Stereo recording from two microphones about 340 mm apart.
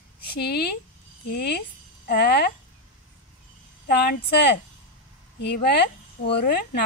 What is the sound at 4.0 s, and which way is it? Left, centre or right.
Speech, left.